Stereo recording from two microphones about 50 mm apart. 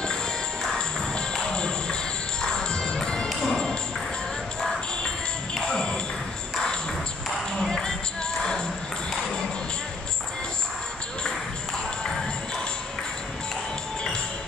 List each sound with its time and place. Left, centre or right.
0.7 s music: centre
7.6 s music: centre